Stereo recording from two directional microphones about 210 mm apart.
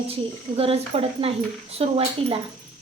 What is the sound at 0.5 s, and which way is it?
A woman's voice, 30° right (ahead or behind).